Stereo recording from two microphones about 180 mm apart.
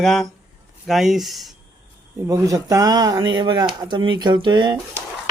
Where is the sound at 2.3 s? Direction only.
20° right (ahead or behind).